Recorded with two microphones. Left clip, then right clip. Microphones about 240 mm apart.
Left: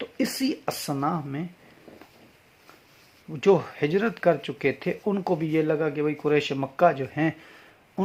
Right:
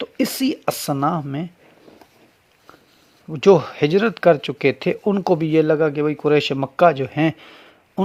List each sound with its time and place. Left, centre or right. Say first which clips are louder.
0.0 s speech: right 6 dB; right
3.2 s speech: right 7 dB; right